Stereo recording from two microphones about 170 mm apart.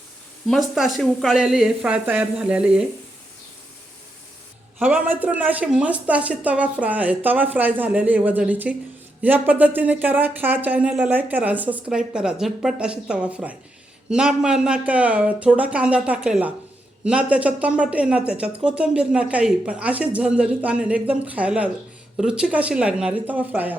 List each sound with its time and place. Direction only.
0.4 s speech: centre (ahead or behind)
4.8 s speech: 10° right (ahead or behind)